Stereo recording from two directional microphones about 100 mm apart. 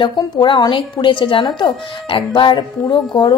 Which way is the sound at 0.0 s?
50° left (ahead or behind).